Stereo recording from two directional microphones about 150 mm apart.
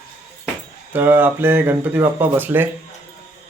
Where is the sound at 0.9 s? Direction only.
15° right (ahead or behind).